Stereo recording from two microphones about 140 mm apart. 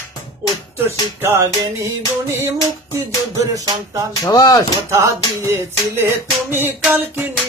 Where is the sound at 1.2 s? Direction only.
20° right (ahead or behind).